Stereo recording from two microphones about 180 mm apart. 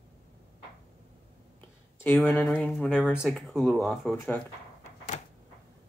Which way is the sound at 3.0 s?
5° right (ahead or behind).